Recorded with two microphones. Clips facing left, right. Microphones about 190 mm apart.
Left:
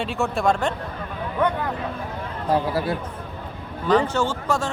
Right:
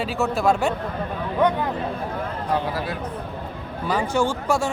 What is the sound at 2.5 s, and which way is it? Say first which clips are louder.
Speech: left 4 dB; 30° left (ahead or behind).